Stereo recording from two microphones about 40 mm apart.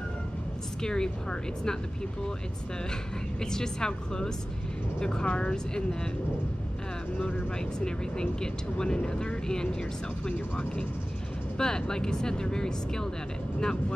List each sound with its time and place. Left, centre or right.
0.8 s speech: centre
3.3 s speech: centre
7.8 s speech: centre
11.5 s speech: centre